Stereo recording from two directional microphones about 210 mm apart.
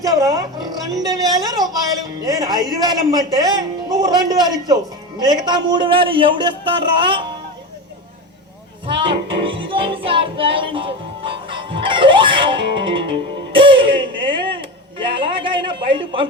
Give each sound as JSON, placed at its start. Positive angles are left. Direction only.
{"t": 0.0, "sound": "a man's voice", "side_deg": -15}
{"t": 9.0, "sound": "music", "side_deg": -25}